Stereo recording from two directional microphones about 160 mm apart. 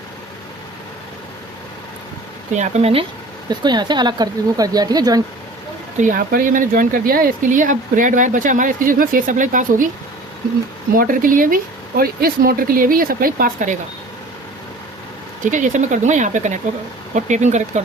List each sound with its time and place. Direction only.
2.6 s speech: 40° right (ahead or behind)
3.5 s speech: 25° right (ahead or behind)
6.0 s speech: 60° right (ahead or behind)
10.9 s speech: 60° right (ahead or behind)
15.4 s speech: 50° right (ahead or behind)